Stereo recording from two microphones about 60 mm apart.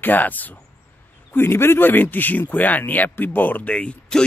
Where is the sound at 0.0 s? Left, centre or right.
Left.